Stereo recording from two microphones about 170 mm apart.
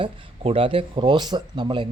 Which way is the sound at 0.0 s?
35° right (ahead or behind).